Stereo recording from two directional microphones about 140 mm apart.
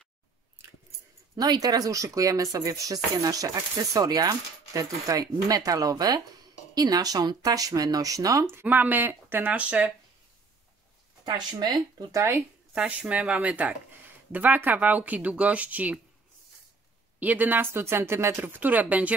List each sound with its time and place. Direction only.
1.3 s speech: 25° right (ahead or behind); by 9.9 s 10° right (ahead or behind)
11.2 s speech: 30° right (ahead or behind)
12.7 s speech: 5° right (ahead or behind)
17.2 s speech: 10° right (ahead or behind)